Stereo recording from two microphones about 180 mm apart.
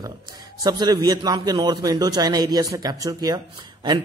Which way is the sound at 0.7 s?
20° right (ahead or behind).